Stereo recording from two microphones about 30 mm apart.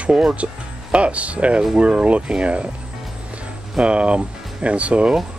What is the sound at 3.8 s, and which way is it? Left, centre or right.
Speech, right.